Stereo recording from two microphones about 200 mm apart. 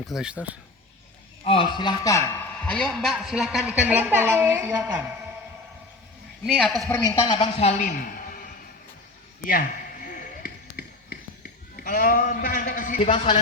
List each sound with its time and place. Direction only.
0.1 s a man's voice: 5° right (ahead or behind)
1.5 s a man's voice: 25° left (ahead or behind); by 5.1 s 15° right (ahead or behind)
6.4 s a man's voice: centre (ahead or behind)
6.9 s a woman's voice: 15° left (ahead or behind); by 8.4 s 45° left (ahead or behind)
9.5 s a sound: 45° left (ahead or behind)
11.8 s speech: 45° left (ahead or behind)
13.0 s a man's voice: 30° left (ahead or behind)